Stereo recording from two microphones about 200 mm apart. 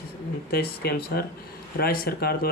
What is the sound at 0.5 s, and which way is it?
Speech, 55° left (ahead or behind).